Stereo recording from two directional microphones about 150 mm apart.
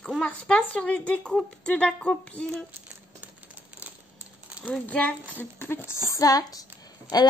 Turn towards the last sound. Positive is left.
turn(degrees=25)  # may be behind; listen again after turning